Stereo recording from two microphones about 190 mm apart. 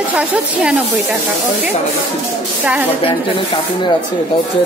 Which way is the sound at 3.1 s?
25° left (ahead or behind).